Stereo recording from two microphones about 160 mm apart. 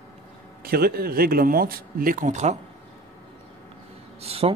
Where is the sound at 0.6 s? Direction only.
70° right (ahead or behind); by 2.5 s 50° right (ahead or behind).